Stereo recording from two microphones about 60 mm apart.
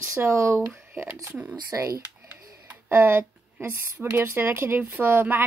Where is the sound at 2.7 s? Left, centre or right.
Right.